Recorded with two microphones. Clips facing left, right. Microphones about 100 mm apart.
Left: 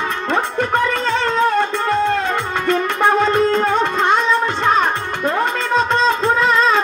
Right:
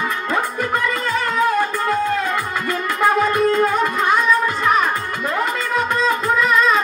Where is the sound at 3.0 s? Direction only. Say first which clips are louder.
Left 1 dB; 25° left (ahead or behind).